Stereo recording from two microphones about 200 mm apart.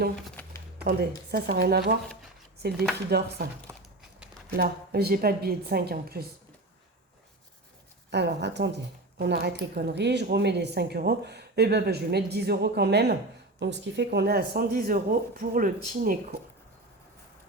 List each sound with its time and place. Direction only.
0.8 s speech: 55° right (ahead or behind)
3.1 s speech: 55° right (ahead or behind)
4.5 s speech: 50° right (ahead or behind)
8.1 s speech: 60° right (ahead or behind); by 16.1 s 45° right (ahead or behind)